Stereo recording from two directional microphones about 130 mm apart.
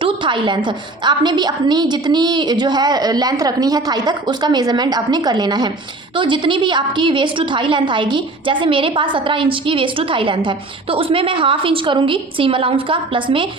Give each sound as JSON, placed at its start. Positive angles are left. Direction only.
{"t": 0.0, "sound": "a woman's voice", "side_deg": -40}